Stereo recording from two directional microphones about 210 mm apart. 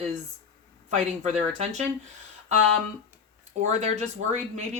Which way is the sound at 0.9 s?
35° right (ahead or behind).